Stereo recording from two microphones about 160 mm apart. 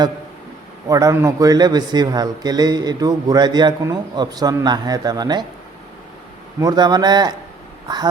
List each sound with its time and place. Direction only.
0.9 s speech: 20° right (ahead or behind)
6.6 s speech: 25° right (ahead or behind)